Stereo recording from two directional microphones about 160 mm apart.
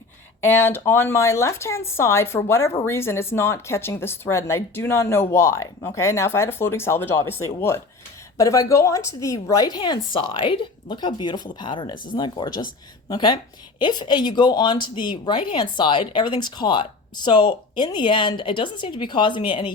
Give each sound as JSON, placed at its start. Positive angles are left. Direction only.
{"t": 0.4, "sound": "speech", "side_deg": 15}